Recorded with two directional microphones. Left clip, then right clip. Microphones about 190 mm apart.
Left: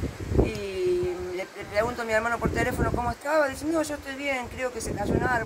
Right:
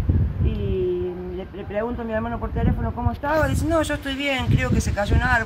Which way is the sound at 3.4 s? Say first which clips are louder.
Right 4 dB; 10° left (ahead or behind).